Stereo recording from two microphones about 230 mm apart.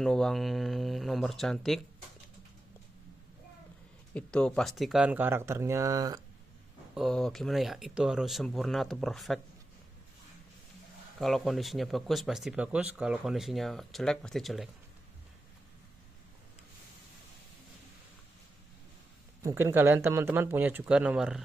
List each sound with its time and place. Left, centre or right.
0.0 s speech: centre
4.1 s speech: centre
6.9 s speech: centre
11.1 s speech: centre
19.4 s speech: centre